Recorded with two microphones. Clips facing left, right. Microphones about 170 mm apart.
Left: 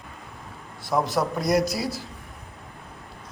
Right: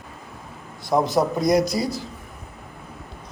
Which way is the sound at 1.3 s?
5° left (ahead or behind).